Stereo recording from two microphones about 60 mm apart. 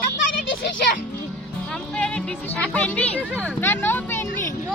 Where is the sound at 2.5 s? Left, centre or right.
Left.